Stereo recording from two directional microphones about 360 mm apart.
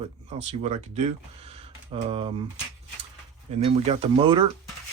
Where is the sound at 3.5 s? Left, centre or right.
Centre.